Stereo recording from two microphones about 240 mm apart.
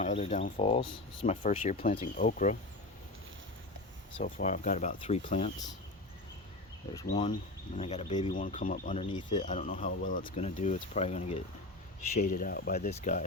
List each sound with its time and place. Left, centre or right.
0.0 s speech: left
4.2 s speech: left
7.1 s speech: centre; by 12.9 s left
12.9 s speech: left